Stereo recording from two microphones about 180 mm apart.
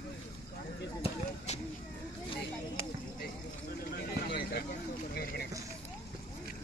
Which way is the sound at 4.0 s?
65° left (ahead or behind).